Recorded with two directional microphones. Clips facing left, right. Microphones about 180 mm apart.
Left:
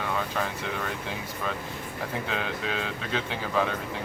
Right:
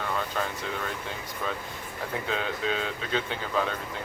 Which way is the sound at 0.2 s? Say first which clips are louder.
Left 1 dB; centre (ahead or behind).